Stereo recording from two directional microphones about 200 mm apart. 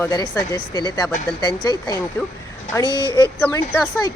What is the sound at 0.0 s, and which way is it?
Speech, 15° left (ahead or behind).